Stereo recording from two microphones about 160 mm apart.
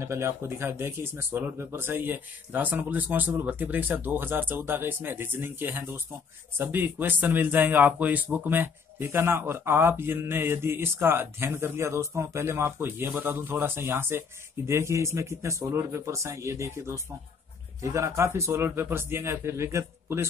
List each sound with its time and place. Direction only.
0.0 s speech: 15° right (ahead or behind)